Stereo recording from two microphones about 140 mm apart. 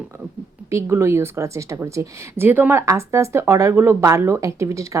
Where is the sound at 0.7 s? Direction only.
20° right (ahead or behind).